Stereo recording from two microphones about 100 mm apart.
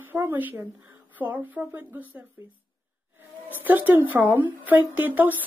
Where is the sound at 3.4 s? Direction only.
20° right (ahead or behind).